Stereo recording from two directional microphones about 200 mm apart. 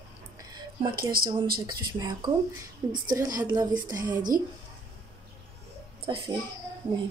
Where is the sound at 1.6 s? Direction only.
20° right (ahead or behind).